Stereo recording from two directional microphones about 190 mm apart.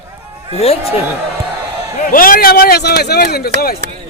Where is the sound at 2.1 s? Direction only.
50° left (ahead or behind).